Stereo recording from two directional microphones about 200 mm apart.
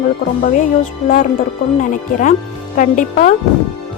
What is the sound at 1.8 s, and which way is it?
A woman's voice, 40° left (ahead or behind).